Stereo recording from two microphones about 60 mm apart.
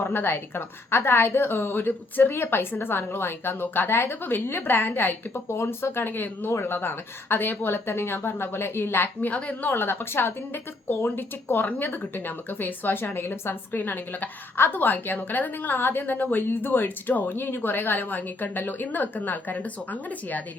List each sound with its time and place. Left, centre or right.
0.0 s a woman's voice: left
9.3 s a woman's voice: left